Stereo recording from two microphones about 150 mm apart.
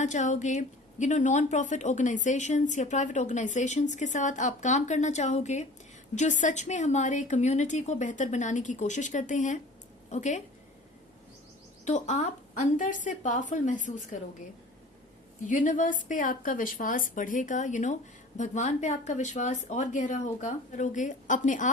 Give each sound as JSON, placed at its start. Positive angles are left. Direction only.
{"t": 0.0, "sound": "speech", "side_deg": 55}
{"t": 11.9, "sound": "speech", "side_deg": 50}
{"t": 15.4, "sound": "speech", "side_deg": 60}